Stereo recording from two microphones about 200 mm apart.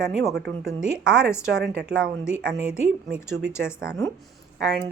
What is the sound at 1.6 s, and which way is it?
Speech, 55° right (ahead or behind).